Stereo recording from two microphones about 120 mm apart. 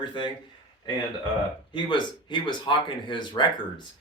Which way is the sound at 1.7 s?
40° left (ahead or behind).